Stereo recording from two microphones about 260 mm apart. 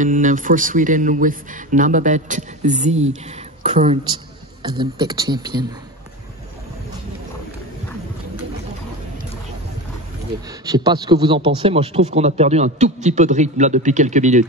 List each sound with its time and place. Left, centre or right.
0.0 s a man's voice: right
10.6 s a man's voice: centre